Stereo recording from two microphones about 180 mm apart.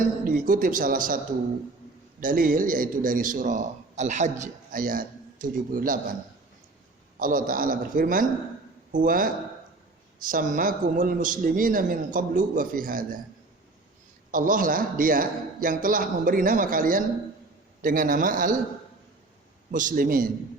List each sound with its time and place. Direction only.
0.0 s a man's voice: 50° right (ahead or behind)
2.2 s a man's voice: 50° right (ahead or behind)
7.2 s a man's voice: 50° right (ahead or behind)
14.3 s a man's voice: 50° right (ahead or behind)
19.7 s a man's voice: 50° right (ahead or behind)